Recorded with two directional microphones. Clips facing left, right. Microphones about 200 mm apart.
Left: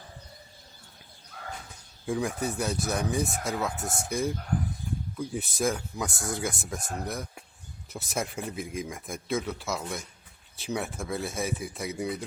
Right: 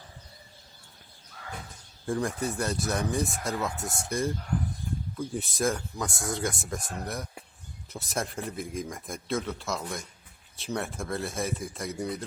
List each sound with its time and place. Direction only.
2.0 s speech: 5° left (ahead or behind)